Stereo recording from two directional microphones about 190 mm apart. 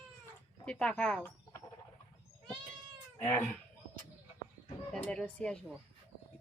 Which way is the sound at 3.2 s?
10° left (ahead or behind).